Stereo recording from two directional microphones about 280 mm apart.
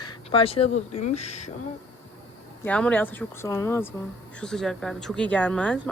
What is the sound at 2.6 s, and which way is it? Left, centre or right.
Speech, centre.